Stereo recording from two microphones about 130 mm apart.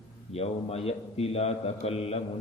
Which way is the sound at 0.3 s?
50° left (ahead or behind).